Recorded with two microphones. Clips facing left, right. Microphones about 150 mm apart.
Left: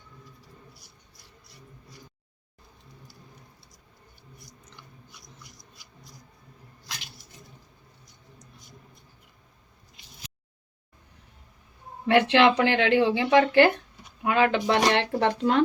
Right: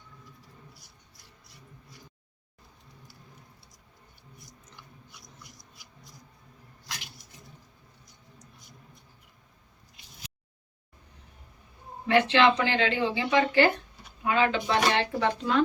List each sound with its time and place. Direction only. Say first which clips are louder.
12.0 s speech: left 2 dB; 65° left (ahead or behind)